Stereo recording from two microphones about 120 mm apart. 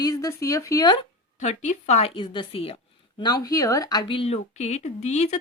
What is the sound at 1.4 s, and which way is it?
Speech, 80° left.